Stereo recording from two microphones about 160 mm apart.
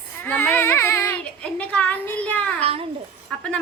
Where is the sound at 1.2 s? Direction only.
5° left (ahead or behind).